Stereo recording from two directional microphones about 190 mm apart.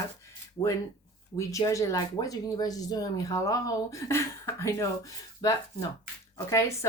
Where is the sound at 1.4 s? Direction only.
15° left (ahead or behind).